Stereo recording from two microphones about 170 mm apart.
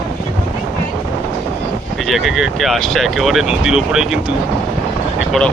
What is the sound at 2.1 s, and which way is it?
Speech, centre (ahead or behind).